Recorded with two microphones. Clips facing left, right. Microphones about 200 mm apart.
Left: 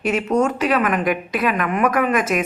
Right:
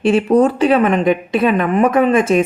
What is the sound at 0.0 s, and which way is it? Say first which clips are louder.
Speech: right 7 dB; 30° right (ahead or behind).